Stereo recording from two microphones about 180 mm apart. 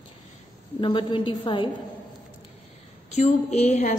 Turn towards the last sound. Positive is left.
turn(degrees=40)  # may be behind; listen again after turning